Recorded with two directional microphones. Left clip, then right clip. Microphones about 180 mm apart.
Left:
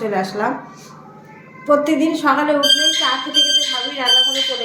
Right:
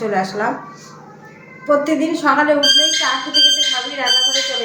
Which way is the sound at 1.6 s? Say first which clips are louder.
Left 1 dB; 10° left (ahead or behind).